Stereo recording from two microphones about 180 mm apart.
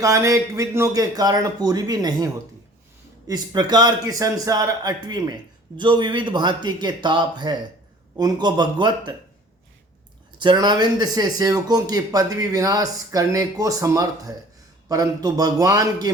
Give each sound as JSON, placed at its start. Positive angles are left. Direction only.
{"t": 0.0, "sound": "speech", "side_deg": -20}
{"t": 10.3, "sound": "speech", "side_deg": -25}